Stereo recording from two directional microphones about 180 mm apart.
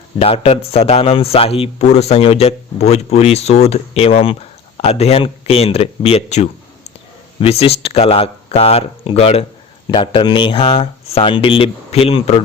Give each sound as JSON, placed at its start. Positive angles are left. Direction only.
{"t": 0.2, "sound": "speech", "side_deg": 35}